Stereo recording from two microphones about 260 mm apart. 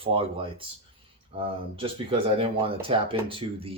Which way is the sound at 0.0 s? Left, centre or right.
Right.